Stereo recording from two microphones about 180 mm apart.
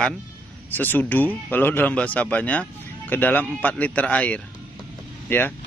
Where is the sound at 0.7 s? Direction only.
10° left (ahead or behind).